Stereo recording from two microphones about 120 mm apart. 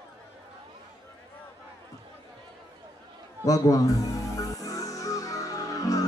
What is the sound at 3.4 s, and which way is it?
Speech, 30° left (ahead or behind).